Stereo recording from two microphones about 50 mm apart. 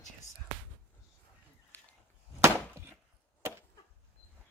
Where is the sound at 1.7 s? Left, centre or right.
Left.